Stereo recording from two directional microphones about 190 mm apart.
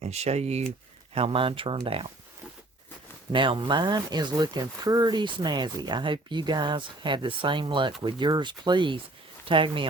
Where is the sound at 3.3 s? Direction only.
25° right (ahead or behind).